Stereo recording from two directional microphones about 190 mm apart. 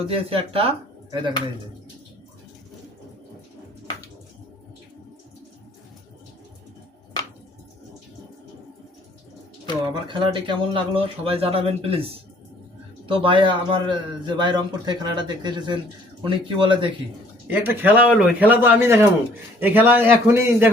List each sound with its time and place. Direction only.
0.0 s a man's voice: 30° right (ahead or behind)
9.9 s a man's voice: 25° right (ahead or behind)
13.1 s a man's voice: 25° right (ahead or behind)
17.5 s a man's voice: 10° right (ahead or behind)